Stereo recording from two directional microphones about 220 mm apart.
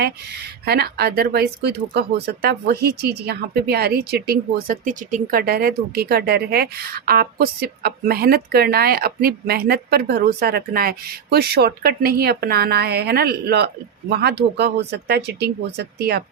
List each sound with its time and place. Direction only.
0.6 s speech: 45° right (ahead or behind)